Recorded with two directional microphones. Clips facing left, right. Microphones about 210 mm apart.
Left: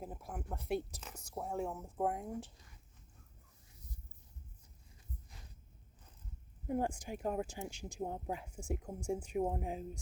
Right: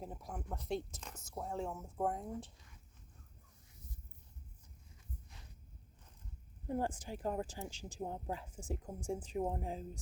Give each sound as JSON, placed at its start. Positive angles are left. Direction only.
{"t": 0.0, "sound": "speech", "side_deg": 5}
{"t": 6.7, "sound": "speech", "side_deg": 10}
{"t": 7.7, "sound": "speech", "side_deg": -35}
{"t": 7.9, "sound": "speech", "side_deg": 15}